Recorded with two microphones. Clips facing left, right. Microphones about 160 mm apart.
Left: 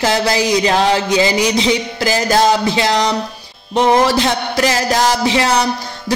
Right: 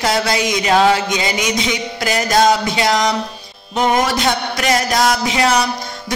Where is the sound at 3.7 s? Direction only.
30° left (ahead or behind).